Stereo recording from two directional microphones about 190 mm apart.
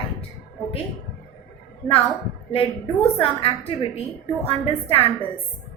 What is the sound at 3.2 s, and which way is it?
Speech, 30° left (ahead or behind).